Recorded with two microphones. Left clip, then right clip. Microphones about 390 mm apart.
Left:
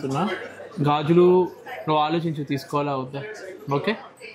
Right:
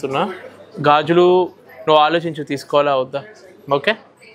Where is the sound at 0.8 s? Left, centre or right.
Right.